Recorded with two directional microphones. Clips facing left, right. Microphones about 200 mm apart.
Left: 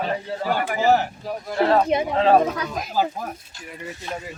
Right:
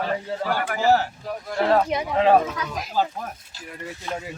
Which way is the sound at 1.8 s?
25° left (ahead or behind).